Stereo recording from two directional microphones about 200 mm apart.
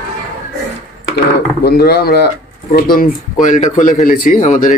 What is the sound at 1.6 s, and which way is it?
Speech, 50° left (ahead or behind).